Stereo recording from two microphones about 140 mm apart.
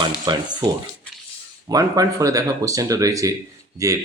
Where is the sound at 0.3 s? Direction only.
30° right (ahead or behind).